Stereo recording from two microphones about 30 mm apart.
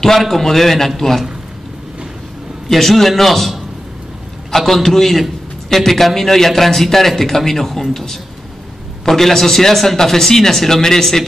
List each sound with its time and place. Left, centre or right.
0.0 s speech: centre
2.7 s a man's voice: centre